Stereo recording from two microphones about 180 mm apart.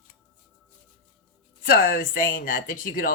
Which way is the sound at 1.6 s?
55° left (ahead or behind).